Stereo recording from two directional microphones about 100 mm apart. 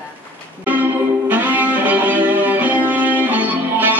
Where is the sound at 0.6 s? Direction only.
15° right (ahead or behind).